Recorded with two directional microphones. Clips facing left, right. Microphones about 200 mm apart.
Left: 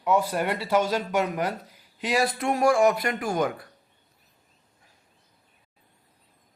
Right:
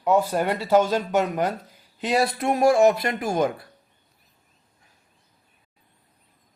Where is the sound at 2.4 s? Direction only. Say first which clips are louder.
Right 4 dB; 25° right (ahead or behind).